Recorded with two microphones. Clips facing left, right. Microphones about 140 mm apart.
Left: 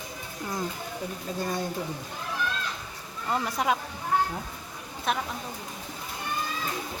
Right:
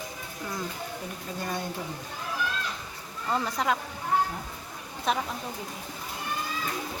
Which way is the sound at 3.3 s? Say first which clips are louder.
Left 1 dB; 15° left (ahead or behind).